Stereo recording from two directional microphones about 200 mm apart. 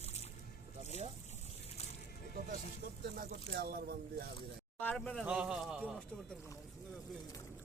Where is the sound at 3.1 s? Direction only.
50° right (ahead or behind).